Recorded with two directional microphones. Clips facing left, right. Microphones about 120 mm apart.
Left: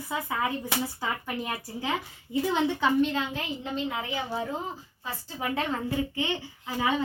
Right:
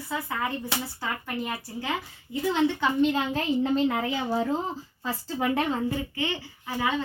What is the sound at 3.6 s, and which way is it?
Speech, 65° right (ahead or behind).